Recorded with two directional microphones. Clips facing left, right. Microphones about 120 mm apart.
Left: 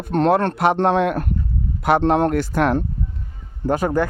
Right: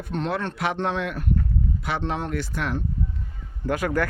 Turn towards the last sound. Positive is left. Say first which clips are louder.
# left 5 dB
turn(degrees=30)  # may be behind; listen again after turning